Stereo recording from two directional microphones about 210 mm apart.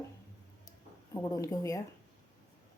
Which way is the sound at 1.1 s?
15° left (ahead or behind).